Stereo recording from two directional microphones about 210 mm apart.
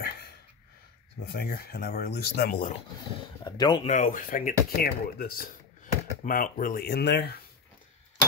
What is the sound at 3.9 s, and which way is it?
Speech, 35° left (ahead or behind).